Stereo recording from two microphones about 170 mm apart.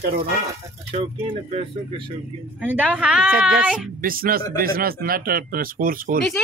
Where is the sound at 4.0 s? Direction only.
55° right (ahead or behind).